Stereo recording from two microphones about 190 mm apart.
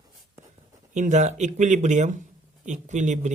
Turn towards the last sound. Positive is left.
turn(degrees=-40)  # may be behind; listen again after turning